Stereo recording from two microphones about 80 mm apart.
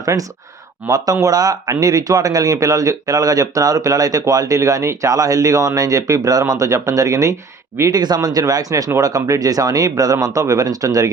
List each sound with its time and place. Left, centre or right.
0.0 s speech: right
8.0 s speech: right